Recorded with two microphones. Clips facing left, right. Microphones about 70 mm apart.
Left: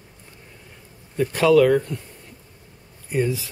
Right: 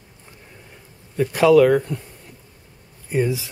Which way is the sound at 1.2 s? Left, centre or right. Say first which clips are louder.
Right 2 dB; centre.